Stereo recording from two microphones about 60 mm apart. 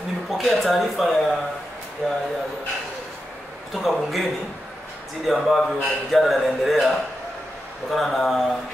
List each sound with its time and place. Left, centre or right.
0.3 s a man's voice: centre
3.8 s a man's voice: centre